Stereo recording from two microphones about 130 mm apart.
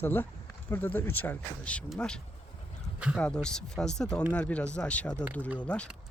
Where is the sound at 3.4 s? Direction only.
5° left (ahead or behind).